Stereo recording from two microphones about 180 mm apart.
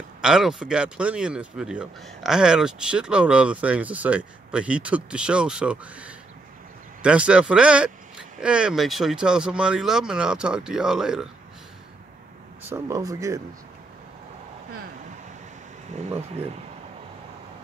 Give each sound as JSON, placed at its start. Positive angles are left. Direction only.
{"t": 0.2, "sound": "speech", "side_deg": -5}
{"t": 12.6, "sound": "speech", "side_deg": -15}
{"t": 16.0, "sound": "speech", "side_deg": -35}